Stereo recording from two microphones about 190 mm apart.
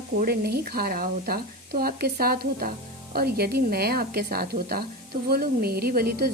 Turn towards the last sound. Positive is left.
turn(degrees=-55)  # may be behind; listen again after turning